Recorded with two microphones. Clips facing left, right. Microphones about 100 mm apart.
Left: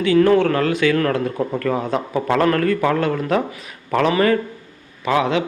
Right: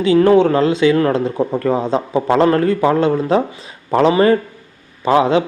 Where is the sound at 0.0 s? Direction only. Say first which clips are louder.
Right 3 dB; 25° right (ahead or behind).